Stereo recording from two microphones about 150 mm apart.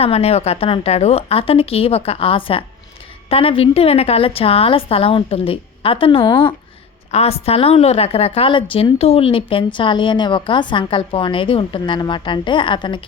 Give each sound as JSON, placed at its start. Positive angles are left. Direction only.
{"t": 0.0, "sound": "a woman's voice", "side_deg": 45}